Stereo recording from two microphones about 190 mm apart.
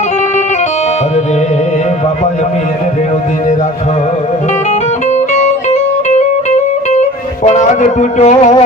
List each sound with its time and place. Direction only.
4.7 s music: 35° left (ahead or behind)